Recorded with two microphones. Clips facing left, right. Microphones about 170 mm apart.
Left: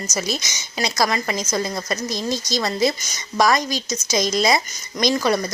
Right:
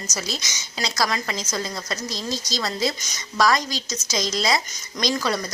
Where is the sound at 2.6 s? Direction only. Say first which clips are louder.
Left 5 dB; 15° left (ahead or behind).